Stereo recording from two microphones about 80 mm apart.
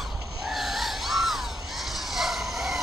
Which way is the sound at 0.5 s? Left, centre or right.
Centre.